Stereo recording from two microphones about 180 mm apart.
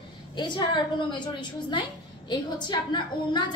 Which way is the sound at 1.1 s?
25° left (ahead or behind).